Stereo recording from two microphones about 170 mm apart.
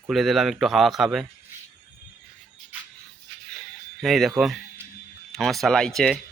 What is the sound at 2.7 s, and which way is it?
Music, 10° right (ahead or behind).